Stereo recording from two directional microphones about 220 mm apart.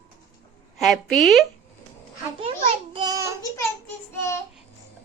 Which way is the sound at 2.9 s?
15° right (ahead or behind).